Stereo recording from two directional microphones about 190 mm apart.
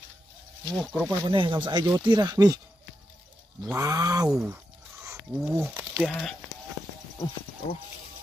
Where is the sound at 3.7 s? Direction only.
15° right (ahead or behind).